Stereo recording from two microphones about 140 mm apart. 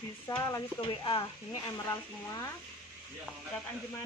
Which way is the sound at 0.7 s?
35° left (ahead or behind).